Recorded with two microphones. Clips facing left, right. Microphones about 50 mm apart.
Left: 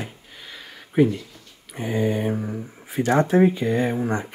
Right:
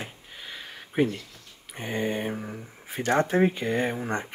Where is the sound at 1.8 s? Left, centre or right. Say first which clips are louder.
Left 6 dB; right.